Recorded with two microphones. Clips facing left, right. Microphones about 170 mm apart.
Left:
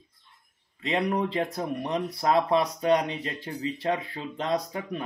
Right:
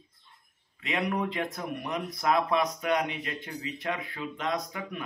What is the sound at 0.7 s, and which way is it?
Speech, 30° left (ahead or behind).